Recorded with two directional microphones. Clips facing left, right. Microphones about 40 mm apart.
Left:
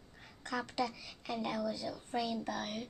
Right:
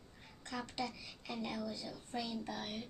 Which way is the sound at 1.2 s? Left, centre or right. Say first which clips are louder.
Left 5 dB; left.